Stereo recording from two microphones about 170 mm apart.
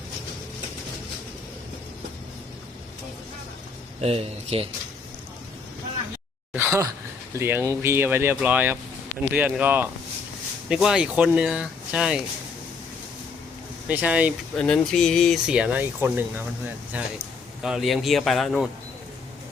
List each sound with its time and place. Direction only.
4.0 s speech: 35° right (ahead or behind)
6.5 s sigh: 15° right (ahead or behind)
7.3 s speech: 15° right (ahead or behind)
13.8 s speech: 10° right (ahead or behind)
14.5 s speech: 5° left (ahead or behind)